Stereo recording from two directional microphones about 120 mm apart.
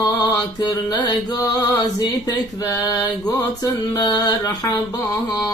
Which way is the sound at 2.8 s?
30° left (ahead or behind).